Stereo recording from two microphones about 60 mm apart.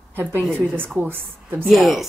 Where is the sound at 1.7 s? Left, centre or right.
Centre.